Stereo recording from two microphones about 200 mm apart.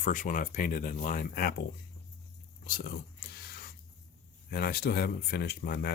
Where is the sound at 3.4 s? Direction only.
50° left (ahead or behind).